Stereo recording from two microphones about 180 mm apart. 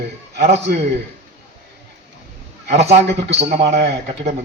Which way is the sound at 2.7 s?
35° right (ahead or behind).